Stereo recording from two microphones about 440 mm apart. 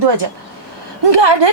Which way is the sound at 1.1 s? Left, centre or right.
Right.